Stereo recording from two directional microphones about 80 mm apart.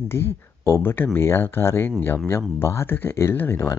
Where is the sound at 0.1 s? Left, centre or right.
Left.